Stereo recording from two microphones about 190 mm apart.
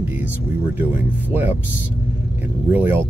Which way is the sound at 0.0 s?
10° right (ahead or behind).